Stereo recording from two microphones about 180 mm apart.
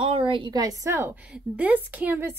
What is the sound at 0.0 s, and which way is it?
A woman's voice, 30° right (ahead or behind).